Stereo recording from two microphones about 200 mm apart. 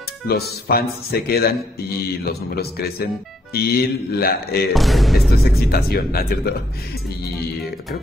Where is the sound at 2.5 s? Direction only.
50° left (ahead or behind).